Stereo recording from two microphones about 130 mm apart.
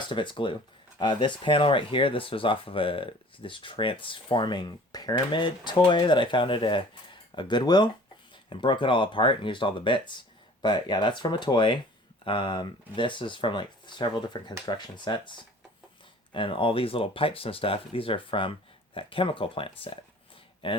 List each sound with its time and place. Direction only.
0.0 s speech: 40° left (ahead or behind)